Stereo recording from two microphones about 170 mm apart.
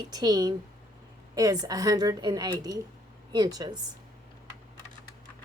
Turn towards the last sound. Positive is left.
turn(degrees=-25)  # may be behind; listen again after turning